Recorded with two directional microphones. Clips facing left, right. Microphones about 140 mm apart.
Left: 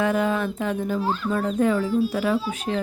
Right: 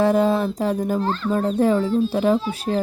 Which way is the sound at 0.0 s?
35° right (ahead or behind).